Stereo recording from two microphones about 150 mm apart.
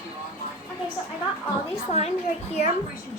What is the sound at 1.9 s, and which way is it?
Speech, 45° left (ahead or behind).